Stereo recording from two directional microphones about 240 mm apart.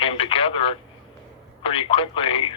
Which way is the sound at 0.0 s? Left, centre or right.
Left.